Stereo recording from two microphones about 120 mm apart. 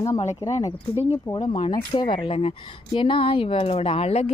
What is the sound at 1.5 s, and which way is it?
Speech, 40° left (ahead or behind).